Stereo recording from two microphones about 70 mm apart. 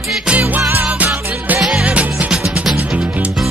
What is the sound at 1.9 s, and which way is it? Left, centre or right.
Music, centre.